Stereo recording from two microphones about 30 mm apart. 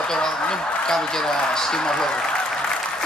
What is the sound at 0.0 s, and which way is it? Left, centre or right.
A man's voice, left.